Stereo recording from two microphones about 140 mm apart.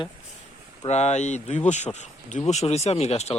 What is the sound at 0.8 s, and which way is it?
Speech, 55° left (ahead or behind).